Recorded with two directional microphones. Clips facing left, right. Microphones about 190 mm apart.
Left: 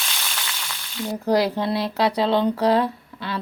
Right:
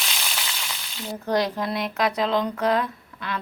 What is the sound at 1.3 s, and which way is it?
Speech, 30° left (ahead or behind).